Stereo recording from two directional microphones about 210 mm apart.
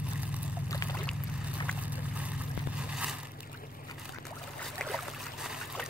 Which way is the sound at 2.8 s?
5° right (ahead or behind).